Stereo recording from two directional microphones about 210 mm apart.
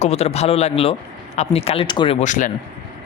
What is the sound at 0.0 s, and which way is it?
A man's voice, 30° left (ahead or behind).